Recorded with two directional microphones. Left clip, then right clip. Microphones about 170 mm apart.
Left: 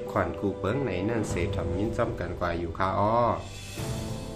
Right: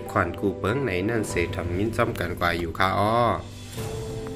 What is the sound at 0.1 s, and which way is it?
Speech, 15° right (ahead or behind).